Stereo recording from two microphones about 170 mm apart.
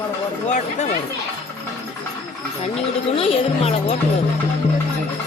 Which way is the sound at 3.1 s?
35° left (ahead or behind).